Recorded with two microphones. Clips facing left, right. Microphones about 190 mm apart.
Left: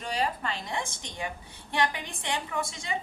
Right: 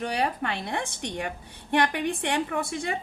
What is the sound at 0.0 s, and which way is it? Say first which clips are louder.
A woman's voice: right 3 dB; 65° right (ahead or behind).